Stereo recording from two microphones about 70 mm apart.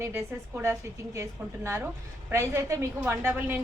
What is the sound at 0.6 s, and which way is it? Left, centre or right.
A woman's voice, right.